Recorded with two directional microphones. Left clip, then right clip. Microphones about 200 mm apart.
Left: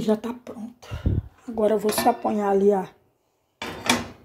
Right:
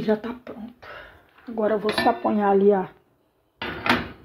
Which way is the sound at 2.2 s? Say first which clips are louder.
Right 2 dB; 5° left (ahead or behind).